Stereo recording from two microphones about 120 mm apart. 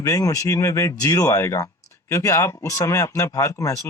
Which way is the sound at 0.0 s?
25° left (ahead or behind).